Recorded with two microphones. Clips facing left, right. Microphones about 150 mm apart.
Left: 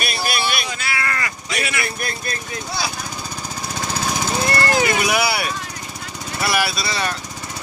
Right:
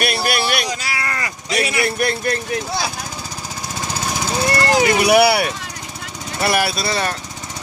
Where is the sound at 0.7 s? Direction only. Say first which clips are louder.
Right 1 dB; 30° right (ahead or behind).